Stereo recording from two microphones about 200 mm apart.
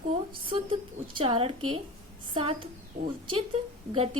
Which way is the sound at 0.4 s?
25° right (ahead or behind).